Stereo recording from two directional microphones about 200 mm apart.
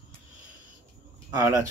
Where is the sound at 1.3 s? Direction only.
15° right (ahead or behind).